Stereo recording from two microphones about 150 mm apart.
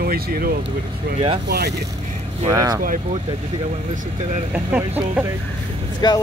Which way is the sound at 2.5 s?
25° right (ahead or behind).